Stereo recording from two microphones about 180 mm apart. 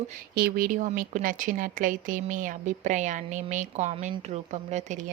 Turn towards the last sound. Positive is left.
turn(degrees=-40)  # may be behind; listen again after turning